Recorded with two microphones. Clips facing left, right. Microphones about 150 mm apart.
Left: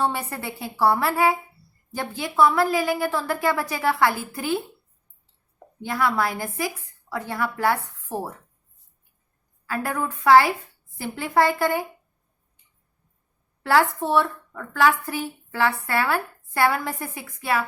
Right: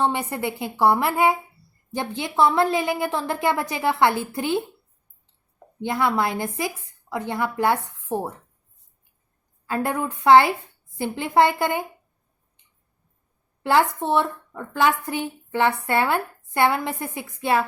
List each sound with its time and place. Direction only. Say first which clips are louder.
0.0 s a woman's voice: right 3 dB; 20° right (ahead or behind)
5.8 s speech: right 1 dB; 20° right (ahead or behind)
9.6 s speech: right 2 dB; 20° right (ahead or behind)
13.6 s speech: even; 20° right (ahead or behind)